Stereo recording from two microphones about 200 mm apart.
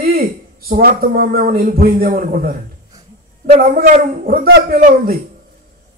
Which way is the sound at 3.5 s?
40° right (ahead or behind).